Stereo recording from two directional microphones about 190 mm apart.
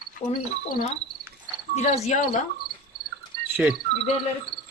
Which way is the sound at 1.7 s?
35° left (ahead or behind).